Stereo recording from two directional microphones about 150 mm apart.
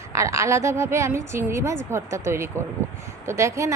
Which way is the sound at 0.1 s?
20° right (ahead or behind).